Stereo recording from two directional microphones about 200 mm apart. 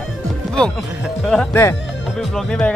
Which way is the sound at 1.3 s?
5° left (ahead or behind).